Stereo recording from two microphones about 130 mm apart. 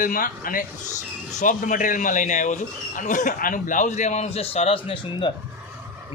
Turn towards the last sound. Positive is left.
turn(degrees=45)  # may be behind; listen again after turning